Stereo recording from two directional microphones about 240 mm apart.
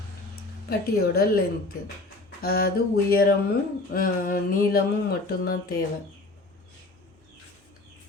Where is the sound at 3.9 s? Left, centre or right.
Left.